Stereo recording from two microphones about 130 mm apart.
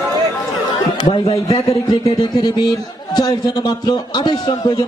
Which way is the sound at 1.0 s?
40° left (ahead or behind).